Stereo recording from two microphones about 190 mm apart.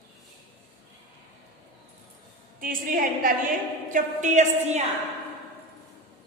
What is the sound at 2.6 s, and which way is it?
A woman's voice, 45° right (ahead or behind).